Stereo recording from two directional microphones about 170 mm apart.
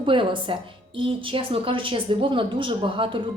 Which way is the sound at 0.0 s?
30° right (ahead or behind).